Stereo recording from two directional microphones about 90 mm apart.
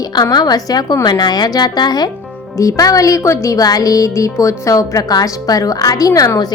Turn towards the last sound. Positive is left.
turn(degrees=40)  # may be behind; listen again after turning